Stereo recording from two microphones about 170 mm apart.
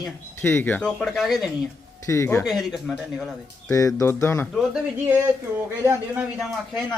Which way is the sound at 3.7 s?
20° left (ahead or behind).